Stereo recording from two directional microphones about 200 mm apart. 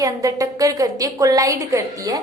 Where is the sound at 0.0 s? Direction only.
15° right (ahead or behind).